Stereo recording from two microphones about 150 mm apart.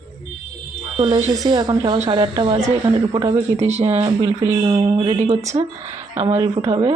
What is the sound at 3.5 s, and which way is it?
Speech, 45° right (ahead or behind).